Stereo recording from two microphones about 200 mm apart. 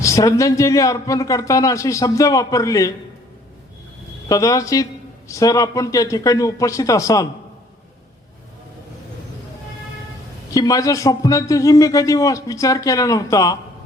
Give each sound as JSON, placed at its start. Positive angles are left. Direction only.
{"t": 0.0, "sound": "a man's voice", "side_deg": 15}
{"t": 4.3, "sound": "a man's voice", "side_deg": 15}
{"t": 10.5, "sound": "a man's voice", "side_deg": 15}